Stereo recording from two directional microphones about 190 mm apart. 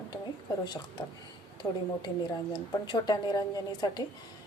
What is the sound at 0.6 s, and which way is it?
A woman's voice, 25° left (ahead or behind).